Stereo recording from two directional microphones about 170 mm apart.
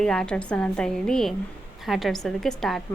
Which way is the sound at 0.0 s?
5° left (ahead or behind).